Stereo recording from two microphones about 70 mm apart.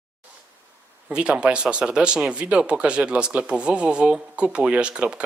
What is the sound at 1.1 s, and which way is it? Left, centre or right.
Speech, centre.